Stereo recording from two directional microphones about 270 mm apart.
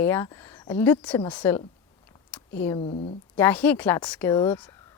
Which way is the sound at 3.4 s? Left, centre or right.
Centre.